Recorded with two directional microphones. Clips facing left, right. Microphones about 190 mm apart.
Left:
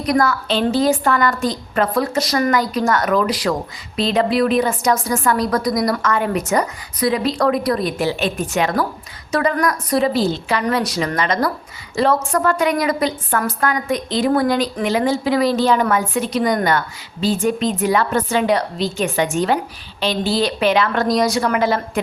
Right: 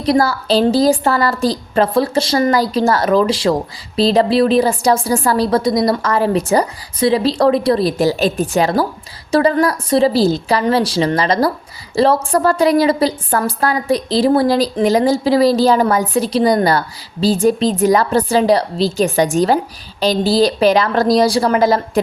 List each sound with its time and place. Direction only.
0.0 s a woman's voice: 30° right (ahead or behind)